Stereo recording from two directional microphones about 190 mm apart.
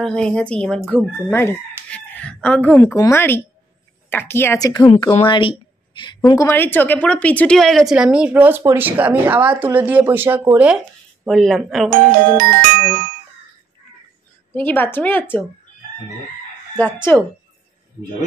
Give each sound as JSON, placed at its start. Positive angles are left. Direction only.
{"t": 0.0, "sound": "a woman's voice", "side_deg": 5}
{"t": 1.9, "sound": "speech", "side_deg": 5}
{"t": 11.2, "sound": "a woman's voice", "side_deg": 0}
{"t": 11.9, "sound": "music", "side_deg": -50}
{"t": 14.5, "sound": "speech", "side_deg": 10}
{"t": 16.7, "sound": "speech", "side_deg": 10}